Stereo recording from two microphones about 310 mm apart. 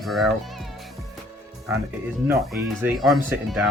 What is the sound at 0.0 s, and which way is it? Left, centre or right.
Speech, centre.